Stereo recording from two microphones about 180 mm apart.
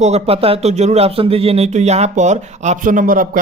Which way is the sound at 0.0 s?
35° right (ahead or behind).